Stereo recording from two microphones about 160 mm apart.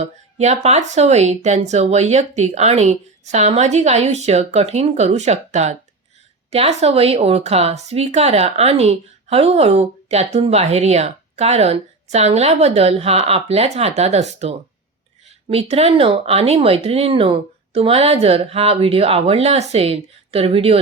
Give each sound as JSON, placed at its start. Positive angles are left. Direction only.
{"t": 0.0, "sound": "speech", "side_deg": -45}